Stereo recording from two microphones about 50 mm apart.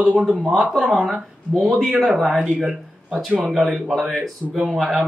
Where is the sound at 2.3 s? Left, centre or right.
Centre.